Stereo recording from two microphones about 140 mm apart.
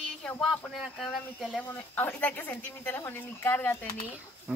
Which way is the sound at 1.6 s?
10° left (ahead or behind).